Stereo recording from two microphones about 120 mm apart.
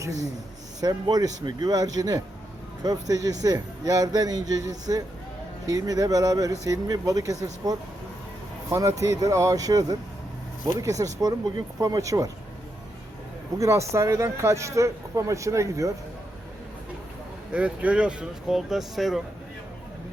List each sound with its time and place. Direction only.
0.8 s a man's voice: 35° right (ahead or behind)
13.6 s speech: 25° right (ahead or behind)
17.5 s speech: 10° right (ahead or behind)